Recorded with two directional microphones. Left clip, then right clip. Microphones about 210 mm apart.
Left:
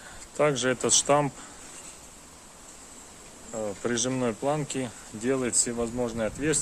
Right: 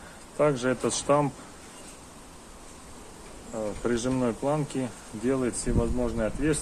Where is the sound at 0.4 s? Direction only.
40° left (ahead or behind).